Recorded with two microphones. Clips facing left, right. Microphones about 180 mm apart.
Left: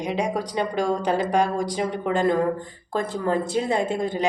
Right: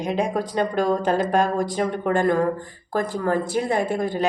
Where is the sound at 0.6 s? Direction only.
50° right (ahead or behind).